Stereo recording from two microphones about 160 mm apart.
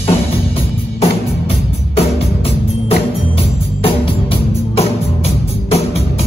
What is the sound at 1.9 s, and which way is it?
Music, 40° left (ahead or behind).